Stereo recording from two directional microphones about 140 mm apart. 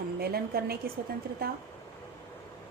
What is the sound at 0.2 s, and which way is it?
Speech, 90° right.